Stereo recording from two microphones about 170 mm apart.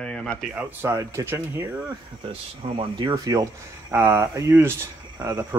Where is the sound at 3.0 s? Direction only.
25° right (ahead or behind).